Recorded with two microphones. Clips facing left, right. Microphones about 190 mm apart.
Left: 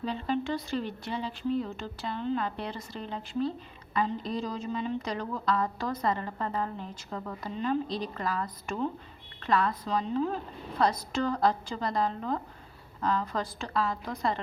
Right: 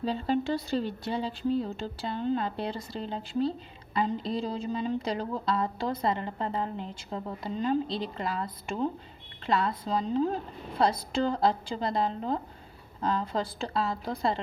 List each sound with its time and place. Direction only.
0.0 s a woman's voice: 30° right (ahead or behind)